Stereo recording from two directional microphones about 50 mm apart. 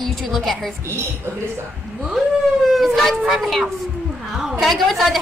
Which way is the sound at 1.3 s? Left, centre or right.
Right.